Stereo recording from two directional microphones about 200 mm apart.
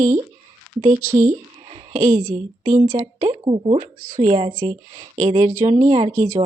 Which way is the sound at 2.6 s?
15° right (ahead or behind).